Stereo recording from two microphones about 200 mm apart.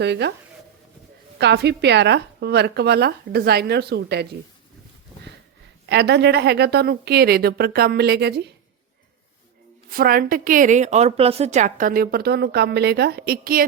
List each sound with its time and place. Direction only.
0.0 s speech: 55° right (ahead or behind)
1.4 s speech: 55° right (ahead or behind)
5.8 s speech: 55° right (ahead or behind)
9.9 s a woman's voice: 45° right (ahead or behind)